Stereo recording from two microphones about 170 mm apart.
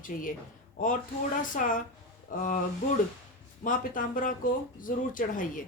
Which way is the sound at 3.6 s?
50° left (ahead or behind).